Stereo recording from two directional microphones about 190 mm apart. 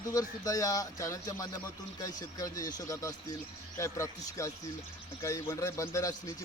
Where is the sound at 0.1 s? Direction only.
15° left (ahead or behind).